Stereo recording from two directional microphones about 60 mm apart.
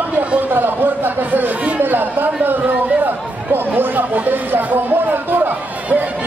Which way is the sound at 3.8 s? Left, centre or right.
Right.